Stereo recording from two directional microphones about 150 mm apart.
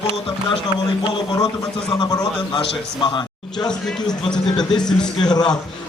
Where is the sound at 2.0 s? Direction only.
25° left (ahead or behind).